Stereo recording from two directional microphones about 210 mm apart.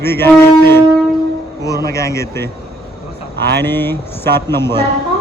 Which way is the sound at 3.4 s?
50° right (ahead or behind).